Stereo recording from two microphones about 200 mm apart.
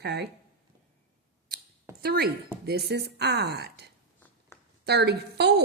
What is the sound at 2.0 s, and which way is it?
A woman's voice, 50° right (ahead or behind).